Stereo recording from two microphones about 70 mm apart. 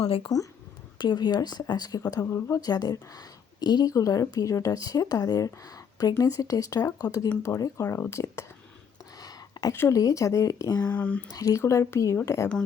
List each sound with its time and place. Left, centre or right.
0.3 s speech: left
0.9 s a woman's voice: left
3.9 s speech: left
7.9 s speech: left
9.1 s a sound: left
9.9 s speech: left
10.8 s speech: left
11.3 s speech: left